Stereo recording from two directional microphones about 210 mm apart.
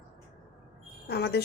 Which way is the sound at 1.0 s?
50° left (ahead or behind).